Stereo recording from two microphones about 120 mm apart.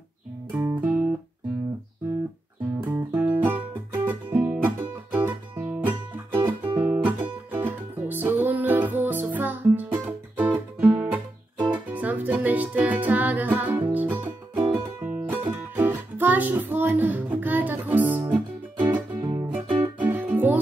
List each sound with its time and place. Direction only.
0.5 s music: 15° right (ahead or behind)
2.9 s music: 10° right (ahead or behind)